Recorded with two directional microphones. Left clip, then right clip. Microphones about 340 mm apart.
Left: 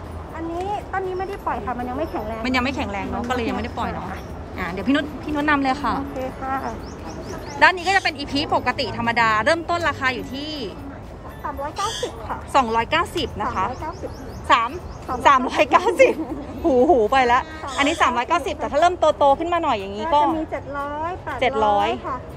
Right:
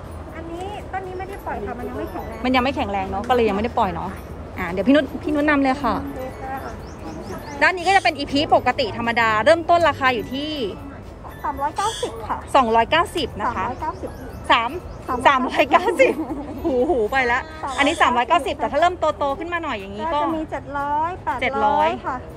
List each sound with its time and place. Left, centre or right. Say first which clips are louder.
2.4 s a woman's voice: right 4 dB; centre
7.5 s speech: even; centre
11.6 s speech: right 2 dB; centre
12.5 s speech: right 3 dB; centre
14.5 s speech: even; centre
20.5 s a sound: right 4 dB; right
21.4 s speech: left 1 dB; centre